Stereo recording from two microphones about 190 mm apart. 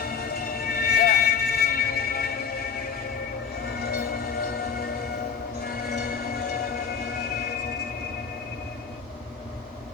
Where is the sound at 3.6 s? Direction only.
55° left (ahead or behind).